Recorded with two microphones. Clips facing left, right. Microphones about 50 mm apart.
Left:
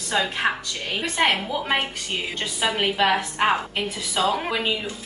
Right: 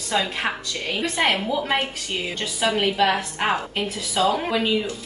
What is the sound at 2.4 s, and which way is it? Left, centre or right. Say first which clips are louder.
Speech: right 2 dB; centre.